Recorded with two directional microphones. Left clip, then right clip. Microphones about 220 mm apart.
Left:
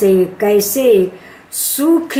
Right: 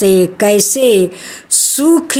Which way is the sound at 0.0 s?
50° right (ahead or behind).